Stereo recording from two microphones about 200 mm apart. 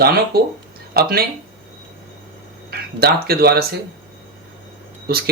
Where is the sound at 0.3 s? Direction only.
50° right (ahead or behind).